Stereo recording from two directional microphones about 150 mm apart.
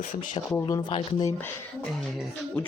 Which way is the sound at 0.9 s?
35° left (ahead or behind).